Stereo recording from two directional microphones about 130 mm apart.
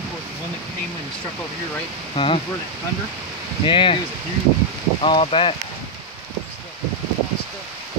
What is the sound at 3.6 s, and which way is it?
Speech, 40° left (ahead or behind).